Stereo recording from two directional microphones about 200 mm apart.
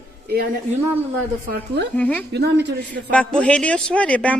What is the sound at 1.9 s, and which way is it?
Speech, 10° left (ahead or behind).